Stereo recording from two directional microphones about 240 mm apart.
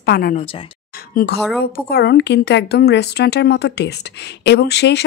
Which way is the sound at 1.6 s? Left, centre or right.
Left.